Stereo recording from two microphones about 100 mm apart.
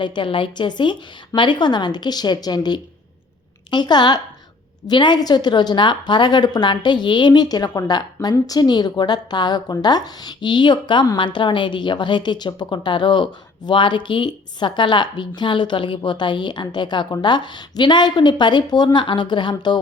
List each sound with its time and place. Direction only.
0.0 s a woman's voice: 55° left (ahead or behind)